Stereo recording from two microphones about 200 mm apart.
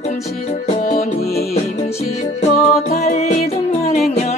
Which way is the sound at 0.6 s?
35° left (ahead or behind).